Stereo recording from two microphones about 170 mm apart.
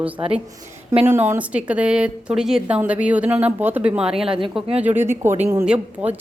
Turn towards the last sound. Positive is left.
turn(degrees=-10)  # may be behind; listen again after turning